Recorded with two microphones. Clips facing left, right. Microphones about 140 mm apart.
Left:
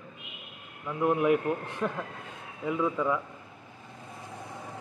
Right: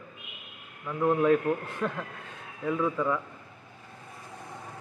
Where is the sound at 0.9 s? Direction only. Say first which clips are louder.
Right 1 dB; 15° left (ahead or behind).